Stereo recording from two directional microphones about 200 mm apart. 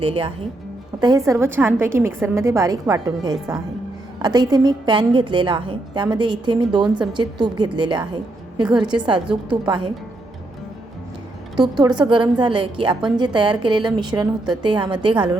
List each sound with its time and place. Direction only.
0.0 s a woman's voice: 25° right (ahead or behind)
1.0 s a woman's voice: 15° right (ahead or behind)
11.6 s a woman's voice: 20° right (ahead or behind)